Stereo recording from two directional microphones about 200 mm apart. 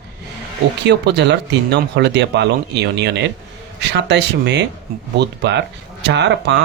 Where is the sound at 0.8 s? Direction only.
60° right (ahead or behind).